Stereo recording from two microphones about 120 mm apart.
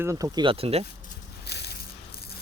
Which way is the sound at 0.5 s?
55° right (ahead or behind).